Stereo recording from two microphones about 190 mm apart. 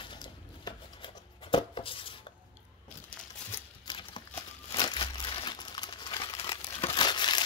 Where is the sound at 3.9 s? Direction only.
25° left (ahead or behind).